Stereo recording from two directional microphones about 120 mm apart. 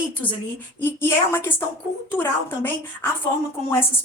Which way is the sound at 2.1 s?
15° left (ahead or behind).